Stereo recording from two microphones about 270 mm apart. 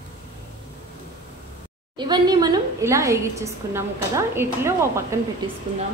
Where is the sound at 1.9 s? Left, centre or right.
Centre.